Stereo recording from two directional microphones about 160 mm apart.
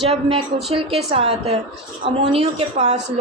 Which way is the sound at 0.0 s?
40° right (ahead or behind).